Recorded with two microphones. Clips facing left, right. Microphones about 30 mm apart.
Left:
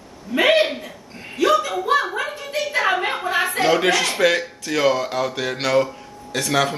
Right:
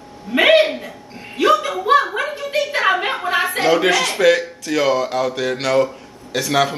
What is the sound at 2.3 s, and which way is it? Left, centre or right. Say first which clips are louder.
Speech: right 3 dB; right.